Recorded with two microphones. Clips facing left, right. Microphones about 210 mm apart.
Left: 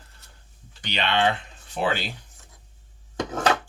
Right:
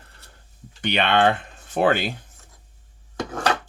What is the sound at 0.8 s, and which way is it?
Speech, 60° right (ahead or behind).